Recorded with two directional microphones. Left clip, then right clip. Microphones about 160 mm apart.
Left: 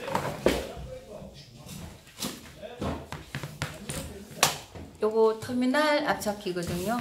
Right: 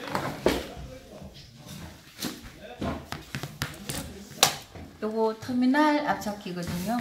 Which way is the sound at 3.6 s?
75° right (ahead or behind).